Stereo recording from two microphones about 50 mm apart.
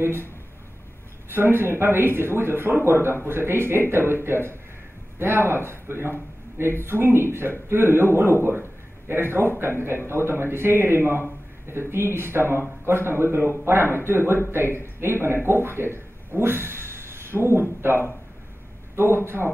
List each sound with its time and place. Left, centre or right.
0.0 s speech: right
1.3 s a man's voice: right